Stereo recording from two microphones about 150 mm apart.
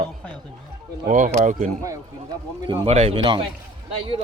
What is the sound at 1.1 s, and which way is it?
Speech, 55° right (ahead or behind).